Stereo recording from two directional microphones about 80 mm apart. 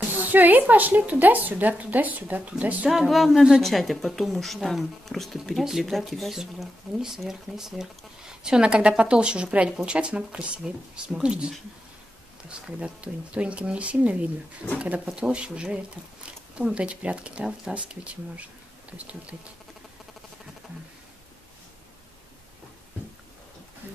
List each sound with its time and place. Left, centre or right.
0.2 s a woman's voice: right
2.9 s a woman's voice: centre